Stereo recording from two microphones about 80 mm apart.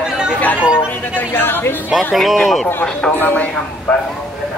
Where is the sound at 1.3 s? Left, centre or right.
Left.